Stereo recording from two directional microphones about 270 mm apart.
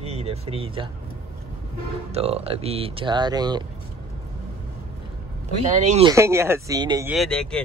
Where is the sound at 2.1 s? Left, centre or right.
Right.